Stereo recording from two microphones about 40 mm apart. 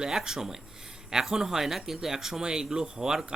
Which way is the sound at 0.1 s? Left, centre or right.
Centre.